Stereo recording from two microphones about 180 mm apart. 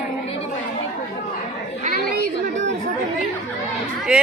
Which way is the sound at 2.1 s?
90° right.